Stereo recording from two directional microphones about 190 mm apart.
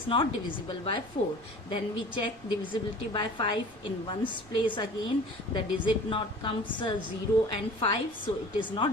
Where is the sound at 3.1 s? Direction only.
25° left (ahead or behind).